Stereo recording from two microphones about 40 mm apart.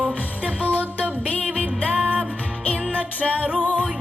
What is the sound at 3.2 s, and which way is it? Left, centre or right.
Music, left.